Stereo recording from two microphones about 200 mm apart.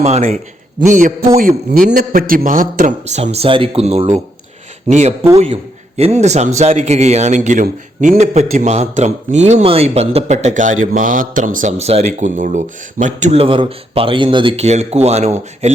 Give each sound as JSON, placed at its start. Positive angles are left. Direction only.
{"t": 0.0, "sound": "a man's voice", "side_deg": -35}